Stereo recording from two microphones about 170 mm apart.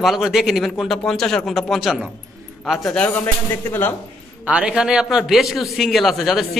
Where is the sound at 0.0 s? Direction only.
Centre (ahead or behind).